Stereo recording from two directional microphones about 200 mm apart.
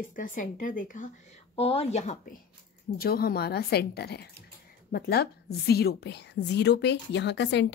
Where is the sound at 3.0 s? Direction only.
50° left (ahead or behind).